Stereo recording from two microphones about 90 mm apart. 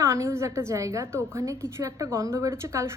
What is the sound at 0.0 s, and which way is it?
A woman's voice, 35° right (ahead or behind).